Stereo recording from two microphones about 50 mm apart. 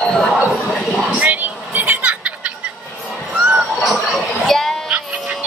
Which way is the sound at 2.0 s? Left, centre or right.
Right.